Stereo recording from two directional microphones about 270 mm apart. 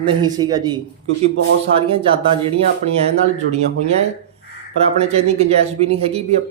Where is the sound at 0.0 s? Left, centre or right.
Centre.